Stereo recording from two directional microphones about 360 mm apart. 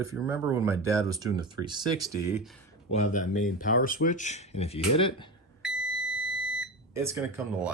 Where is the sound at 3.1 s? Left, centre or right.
Left.